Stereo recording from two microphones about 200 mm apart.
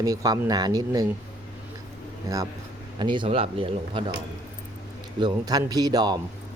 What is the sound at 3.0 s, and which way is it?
Speech, 25° right (ahead or behind).